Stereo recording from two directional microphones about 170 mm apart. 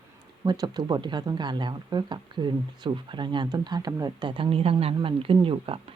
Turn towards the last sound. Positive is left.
turn(degrees=-30)  # may be behind; listen again after turning